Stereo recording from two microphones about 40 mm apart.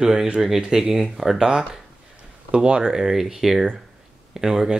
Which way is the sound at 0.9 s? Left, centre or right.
Centre.